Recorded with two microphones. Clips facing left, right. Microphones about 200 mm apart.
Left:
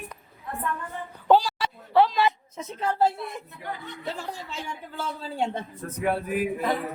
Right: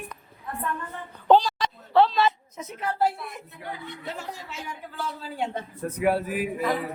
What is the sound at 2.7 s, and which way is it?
Speech, 30° left (ahead or behind).